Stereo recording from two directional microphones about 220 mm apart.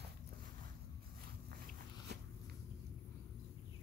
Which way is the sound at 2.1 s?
50° right (ahead or behind).